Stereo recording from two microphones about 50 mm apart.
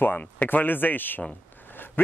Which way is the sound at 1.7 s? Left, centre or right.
Left.